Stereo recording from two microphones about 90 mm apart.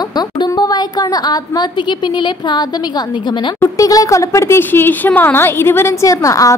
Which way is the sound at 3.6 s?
40° left (ahead or behind).